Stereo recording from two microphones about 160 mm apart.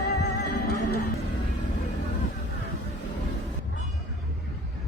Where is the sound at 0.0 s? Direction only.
85° left.